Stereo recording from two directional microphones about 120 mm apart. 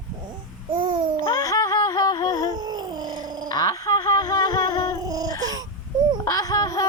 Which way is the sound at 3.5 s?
30° left (ahead or behind).